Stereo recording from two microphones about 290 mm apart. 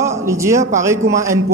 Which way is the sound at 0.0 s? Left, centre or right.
Centre.